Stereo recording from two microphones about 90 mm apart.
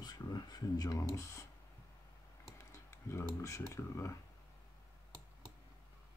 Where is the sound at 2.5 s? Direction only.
30° left (ahead or behind).